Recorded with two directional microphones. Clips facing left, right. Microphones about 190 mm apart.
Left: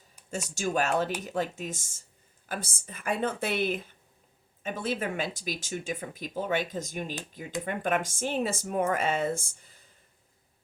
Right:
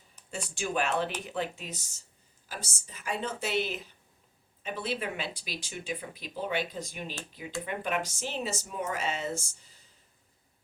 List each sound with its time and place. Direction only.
0.3 s speech: 45° left (ahead or behind)